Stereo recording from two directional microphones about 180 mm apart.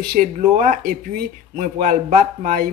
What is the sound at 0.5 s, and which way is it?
Speech, 45° right (ahead or behind).